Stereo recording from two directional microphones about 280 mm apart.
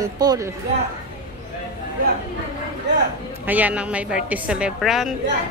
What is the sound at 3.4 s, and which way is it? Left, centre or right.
A woman's voice, centre.